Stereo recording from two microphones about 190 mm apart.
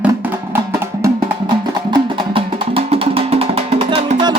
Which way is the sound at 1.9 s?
30° right (ahead or behind).